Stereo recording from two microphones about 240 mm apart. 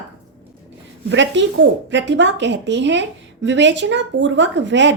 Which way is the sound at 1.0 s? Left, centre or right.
Right.